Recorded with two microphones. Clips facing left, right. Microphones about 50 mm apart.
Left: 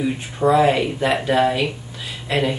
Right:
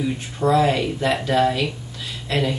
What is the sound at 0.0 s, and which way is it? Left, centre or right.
Speech, centre.